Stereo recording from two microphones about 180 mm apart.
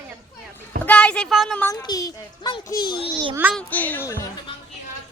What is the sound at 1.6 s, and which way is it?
Speech, 20° left (ahead or behind).